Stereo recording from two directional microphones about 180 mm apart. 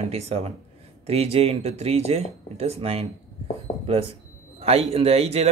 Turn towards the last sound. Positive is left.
turn(degrees=-35)  # may be behind; listen again after turning